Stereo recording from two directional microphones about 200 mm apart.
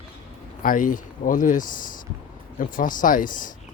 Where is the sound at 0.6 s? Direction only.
45° left (ahead or behind).